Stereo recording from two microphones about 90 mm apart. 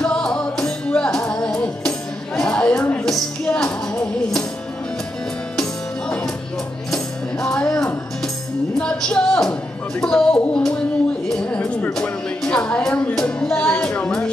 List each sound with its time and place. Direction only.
0.0 s music: 10° left (ahead or behind)
5.6 s music: 10° left (ahead or behind)
9.9 s a sound: 10° left (ahead or behind)
11.9 s music: 10° left (ahead or behind)